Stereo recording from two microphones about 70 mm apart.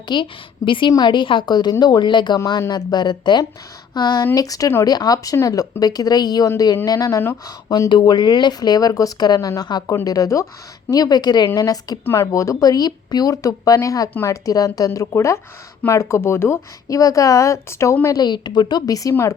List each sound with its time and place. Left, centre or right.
0.1 s a woman's voice: left
4.4 s speech: left
5.8 s speech: left
6.8 s speech: left
7.4 s speech: left
9.9 s a woman's voice: left
10.9 s speech: left
11.5 s speech: left
12.0 s speech: left
12.3 s a woman's voice: left
16.9 s a woman's voice: left
18.2 s a woman's voice: left